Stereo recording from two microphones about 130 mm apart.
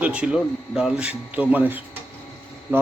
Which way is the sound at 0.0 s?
10° right (ahead or behind).